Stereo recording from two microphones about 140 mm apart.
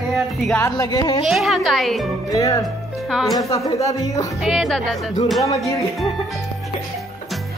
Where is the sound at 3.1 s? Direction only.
Centre (ahead or behind).